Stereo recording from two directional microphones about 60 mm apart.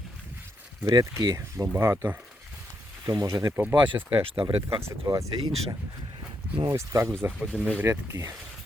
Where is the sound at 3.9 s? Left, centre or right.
Right.